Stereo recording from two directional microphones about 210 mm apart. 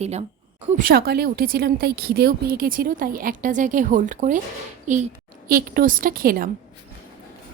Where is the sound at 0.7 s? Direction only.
45° right (ahead or behind).